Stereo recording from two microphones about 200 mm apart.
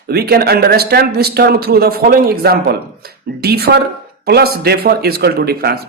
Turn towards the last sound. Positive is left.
turn(degrees=-50)  # may be behind; listen again after turning